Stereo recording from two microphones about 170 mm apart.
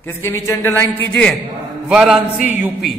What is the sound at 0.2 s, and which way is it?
A woman's voice, 15° left (ahead or behind).